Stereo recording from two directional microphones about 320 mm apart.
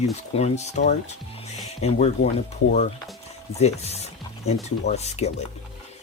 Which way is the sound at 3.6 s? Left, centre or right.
Centre.